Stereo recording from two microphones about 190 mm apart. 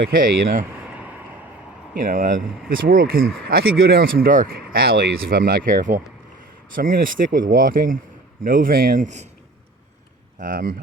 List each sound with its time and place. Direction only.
0.0 s speech: 50° right (ahead or behind)
2.0 s speech: 45° right (ahead or behind)
10.4 s speech: 45° right (ahead or behind)